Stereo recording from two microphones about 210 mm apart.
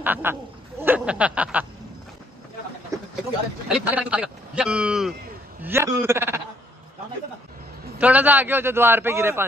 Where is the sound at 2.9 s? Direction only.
15° right (ahead or behind).